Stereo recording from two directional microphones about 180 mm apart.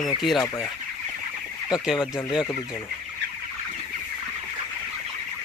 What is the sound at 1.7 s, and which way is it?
Speech, 5° right (ahead or behind).